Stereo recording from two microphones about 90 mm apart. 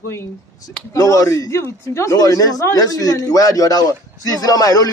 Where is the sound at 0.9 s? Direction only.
40° left (ahead or behind).